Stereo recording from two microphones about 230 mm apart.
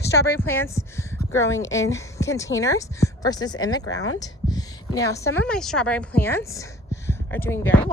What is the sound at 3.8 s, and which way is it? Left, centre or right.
Speech, left.